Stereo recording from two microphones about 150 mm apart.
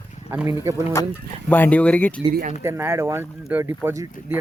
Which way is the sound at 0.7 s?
20° right (ahead or behind).